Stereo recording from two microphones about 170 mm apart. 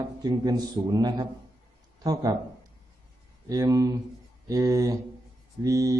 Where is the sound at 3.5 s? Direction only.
20° right (ahead or behind).